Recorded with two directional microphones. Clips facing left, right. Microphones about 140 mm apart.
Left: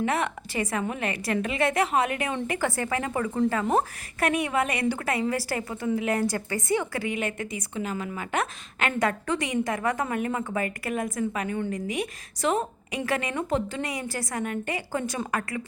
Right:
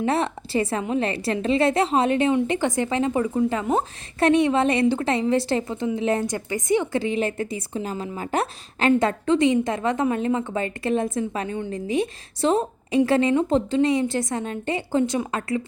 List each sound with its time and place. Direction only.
0.0 s a woman's voice: 30° right (ahead or behind)